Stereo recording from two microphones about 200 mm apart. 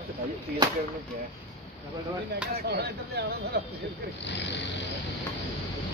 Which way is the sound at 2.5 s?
55° right (ahead or behind).